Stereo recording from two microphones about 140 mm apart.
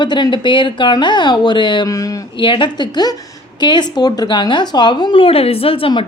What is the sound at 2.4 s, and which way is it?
A woman's voice, 35° left (ahead or behind).